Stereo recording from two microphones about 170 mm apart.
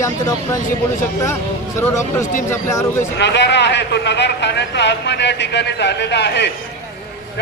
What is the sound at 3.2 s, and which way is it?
A man's voice, 90° left.